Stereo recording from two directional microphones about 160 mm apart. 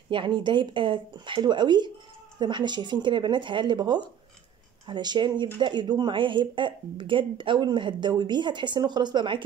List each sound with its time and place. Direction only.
0.1 s speech: 30° right (ahead or behind)